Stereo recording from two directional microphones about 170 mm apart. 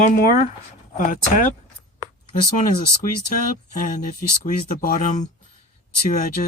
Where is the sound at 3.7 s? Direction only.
50° left (ahead or behind).